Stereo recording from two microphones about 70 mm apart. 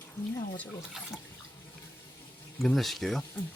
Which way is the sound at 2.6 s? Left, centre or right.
Centre.